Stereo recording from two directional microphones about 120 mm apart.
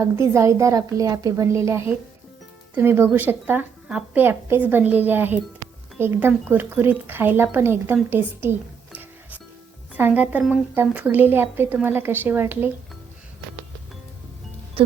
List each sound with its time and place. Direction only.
0.0 s a woman's voice: 25° right (ahead or behind)
8.1 s music: 20° right (ahead or behind)
9.9 s a woman's voice: 15° right (ahead or behind)
14.8 s speech: 50° right (ahead or behind)